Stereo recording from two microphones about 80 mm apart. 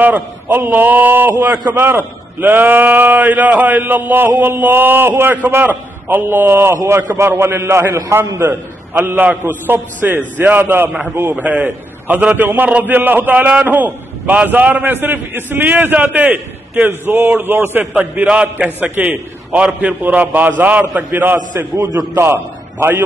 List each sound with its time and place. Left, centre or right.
0.0 s a man's voice: right
9.0 s a man's voice: right
11.4 s a man's voice: centre
18.1 s a man's voice: centre